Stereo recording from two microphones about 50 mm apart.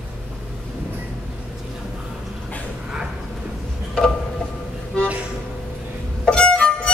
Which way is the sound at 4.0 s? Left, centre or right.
Left.